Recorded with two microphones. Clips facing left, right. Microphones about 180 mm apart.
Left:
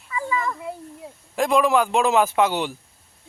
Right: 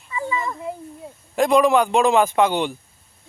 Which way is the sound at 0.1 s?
25° right (ahead or behind).